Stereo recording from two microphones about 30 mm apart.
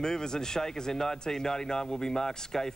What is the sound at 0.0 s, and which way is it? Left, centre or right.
Speech, left.